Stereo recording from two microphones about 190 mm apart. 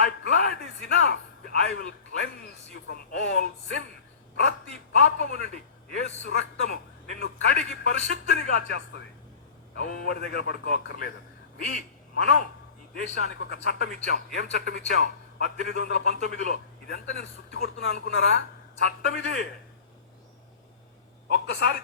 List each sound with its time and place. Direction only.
0.0 s a man's voice: 55° left (ahead or behind)
7.2 s a man's voice: 55° left (ahead or behind)
13.1 s a man's voice: 65° left (ahead or behind)
21.2 s a woman's voice: 60° left (ahead or behind)